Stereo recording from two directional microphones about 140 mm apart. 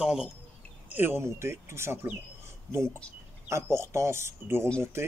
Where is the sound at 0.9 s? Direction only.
15° right (ahead or behind).